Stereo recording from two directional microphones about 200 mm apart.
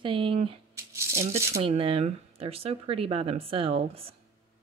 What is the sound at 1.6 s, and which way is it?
Speech, 30° right (ahead or behind).